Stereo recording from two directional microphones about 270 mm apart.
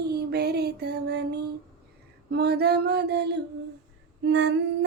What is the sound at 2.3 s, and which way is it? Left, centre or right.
Mantra, right.